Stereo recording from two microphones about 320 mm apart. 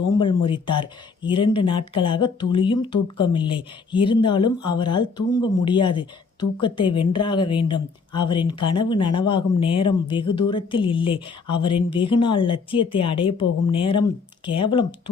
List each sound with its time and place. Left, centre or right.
0.2 s a woman's voice: centre